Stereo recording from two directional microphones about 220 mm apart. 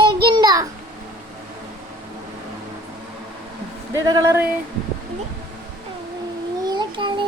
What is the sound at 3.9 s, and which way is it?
Speech, 15° right (ahead or behind).